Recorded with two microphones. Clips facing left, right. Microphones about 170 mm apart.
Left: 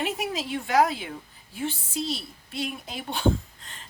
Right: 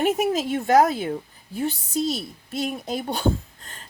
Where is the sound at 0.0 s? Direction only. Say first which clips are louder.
Right 8 dB; 45° right (ahead or behind).